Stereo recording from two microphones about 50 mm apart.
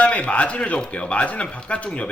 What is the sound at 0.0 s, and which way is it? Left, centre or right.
Speech, left.